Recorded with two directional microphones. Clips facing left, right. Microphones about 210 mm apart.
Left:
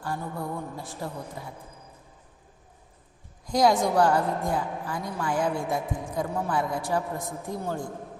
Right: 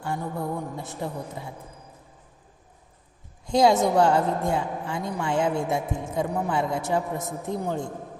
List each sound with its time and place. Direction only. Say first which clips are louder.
0.0 s a woman's voice: right 3 dB; 20° right (ahead or behind)
3.4 s a woman's voice: right 3 dB; 25° right (ahead or behind)